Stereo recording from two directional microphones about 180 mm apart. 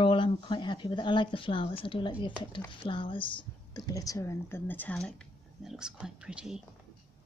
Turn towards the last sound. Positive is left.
turn(degrees=-5)  # may be behind; listen again after turning